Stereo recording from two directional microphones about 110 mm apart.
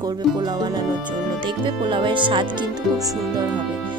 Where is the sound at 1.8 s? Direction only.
45° right (ahead or behind).